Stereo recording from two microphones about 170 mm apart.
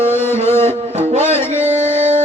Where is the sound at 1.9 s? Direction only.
40° right (ahead or behind).